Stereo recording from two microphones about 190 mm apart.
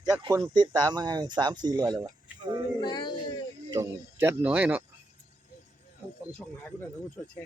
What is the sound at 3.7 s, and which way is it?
Speech, 15° right (ahead or behind).